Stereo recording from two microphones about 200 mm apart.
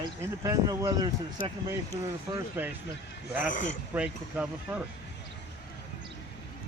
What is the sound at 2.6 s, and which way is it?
Speech, 10° right (ahead or behind).